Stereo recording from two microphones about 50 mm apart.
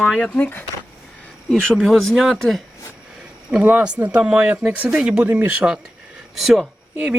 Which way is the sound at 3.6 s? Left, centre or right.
Right.